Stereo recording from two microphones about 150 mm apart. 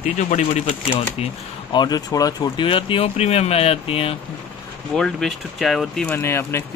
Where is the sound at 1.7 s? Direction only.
25° left (ahead or behind).